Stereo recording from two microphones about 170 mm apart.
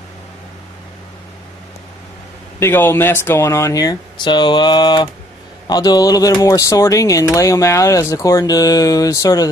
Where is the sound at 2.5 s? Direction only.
15° left (ahead or behind).